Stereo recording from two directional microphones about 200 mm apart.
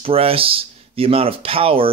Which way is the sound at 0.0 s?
30° right (ahead or behind).